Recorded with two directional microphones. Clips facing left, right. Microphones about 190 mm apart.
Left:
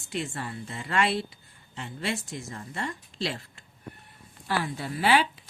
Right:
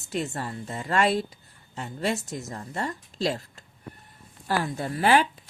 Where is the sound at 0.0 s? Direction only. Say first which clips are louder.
Right 3 dB; 40° right (ahead or behind).